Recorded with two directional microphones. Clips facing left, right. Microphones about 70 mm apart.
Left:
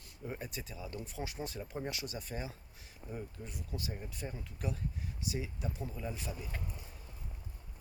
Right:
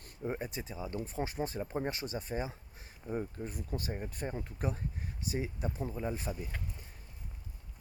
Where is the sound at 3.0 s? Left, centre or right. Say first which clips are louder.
Right 7 dB; right.